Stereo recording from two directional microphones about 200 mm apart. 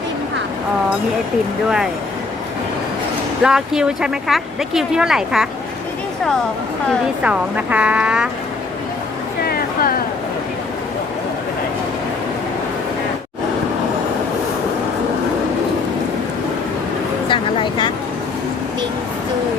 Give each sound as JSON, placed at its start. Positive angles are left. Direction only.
{"t": 3.4, "sound": "speech", "side_deg": -5}
{"t": 7.2, "sound": "speech", "side_deg": -5}
{"t": 9.5, "sound": "a sound", "side_deg": 50}
{"t": 17.2, "sound": "vehicle", "side_deg": 25}